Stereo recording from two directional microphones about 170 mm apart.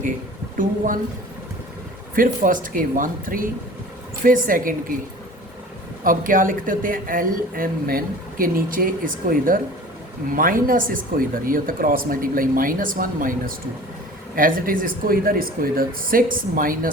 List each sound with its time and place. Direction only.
2.1 s a woman's voice: 55° right (ahead or behind)
6.1 s a woman's voice: 55° right (ahead or behind)